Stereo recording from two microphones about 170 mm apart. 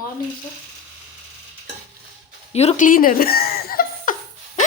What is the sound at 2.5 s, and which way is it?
Speech, 45° left (ahead or behind).